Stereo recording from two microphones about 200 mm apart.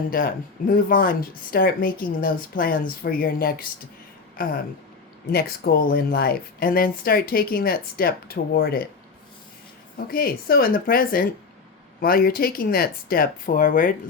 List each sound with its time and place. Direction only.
0.1 s speech: 45° left (ahead or behind)
5.3 s speech: 50° left (ahead or behind)
10.1 s speech: 45° left (ahead or behind)